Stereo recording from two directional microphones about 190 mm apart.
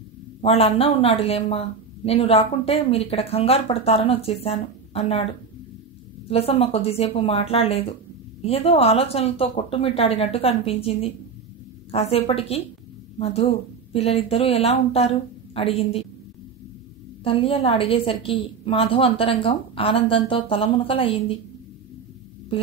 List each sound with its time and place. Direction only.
0.4 s speech: 30° left (ahead or behind)
17.2 s a woman's voice: 30° left (ahead or behind)